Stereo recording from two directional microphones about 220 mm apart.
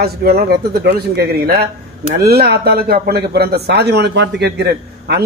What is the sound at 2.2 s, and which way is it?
A man's voice, 45° right (ahead or behind).